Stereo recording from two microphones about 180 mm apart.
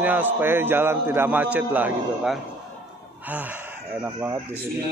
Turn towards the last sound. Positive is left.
turn(degrees=-15)  # may be behind; listen again after turning